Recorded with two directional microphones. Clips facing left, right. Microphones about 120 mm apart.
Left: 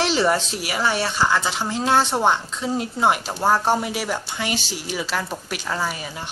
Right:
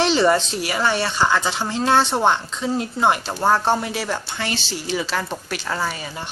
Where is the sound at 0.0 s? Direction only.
5° left (ahead or behind).